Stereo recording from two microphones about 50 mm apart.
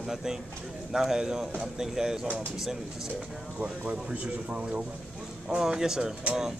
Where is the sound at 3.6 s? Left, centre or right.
Right.